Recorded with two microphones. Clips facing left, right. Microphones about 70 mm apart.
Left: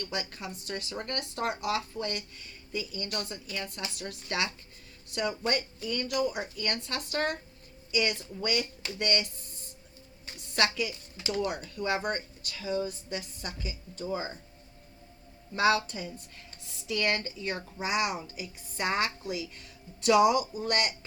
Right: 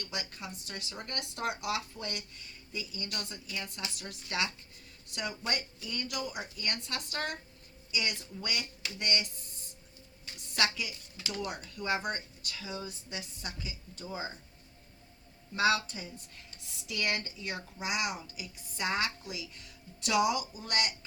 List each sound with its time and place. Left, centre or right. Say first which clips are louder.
0.0 s speech: left 5 dB; left
11.3 s speech: left 7 dB; left
15.6 s speech: left 3 dB; left